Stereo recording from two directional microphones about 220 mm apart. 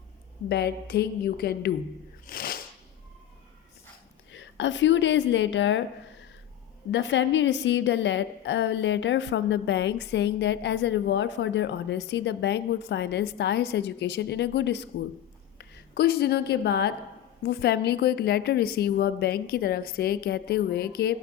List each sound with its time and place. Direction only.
0.4 s a woman's voice: 50° left (ahead or behind)
2.2 s a sound: 40° left (ahead or behind)
4.3 s a woman's voice: 55° left (ahead or behind)
6.9 s a woman's voice: 55° left (ahead or behind)